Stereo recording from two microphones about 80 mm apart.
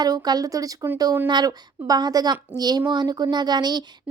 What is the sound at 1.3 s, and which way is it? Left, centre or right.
A woman's voice, right.